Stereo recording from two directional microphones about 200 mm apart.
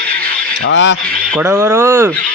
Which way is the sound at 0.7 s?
65° left (ahead or behind).